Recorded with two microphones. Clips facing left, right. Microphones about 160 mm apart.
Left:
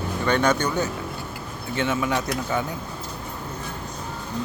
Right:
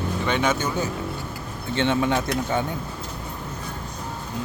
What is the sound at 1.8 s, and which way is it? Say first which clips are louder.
Speech: right 2 dB; 30° right (ahead or behind).